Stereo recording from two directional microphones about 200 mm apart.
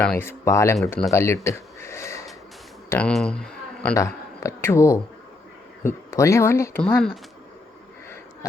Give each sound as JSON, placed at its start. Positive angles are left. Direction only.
{"t": 0.0, "sound": "speech", "side_deg": 10}
{"t": 0.9, "sound": "speech", "side_deg": 5}
{"t": 1.1, "sound": "speech", "side_deg": 15}
{"t": 1.5, "sound": "a sound", "side_deg": 15}
{"t": 2.9, "sound": "a man's voice", "side_deg": 5}
{"t": 3.9, "sound": "speech", "side_deg": 15}